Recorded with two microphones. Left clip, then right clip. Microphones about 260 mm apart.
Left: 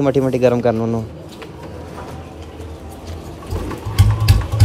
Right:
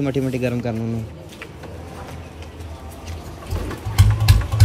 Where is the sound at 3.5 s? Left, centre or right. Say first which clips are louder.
Left 2 dB; centre.